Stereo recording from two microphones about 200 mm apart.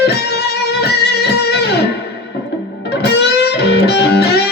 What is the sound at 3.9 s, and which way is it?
Music, 55° left (ahead or behind).